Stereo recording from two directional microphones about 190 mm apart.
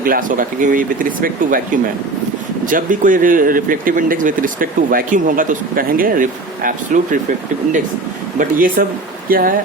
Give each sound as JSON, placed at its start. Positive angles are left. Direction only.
{"t": 0.0, "sound": "speech", "side_deg": -45}
{"t": 8.4, "sound": "speech", "side_deg": -45}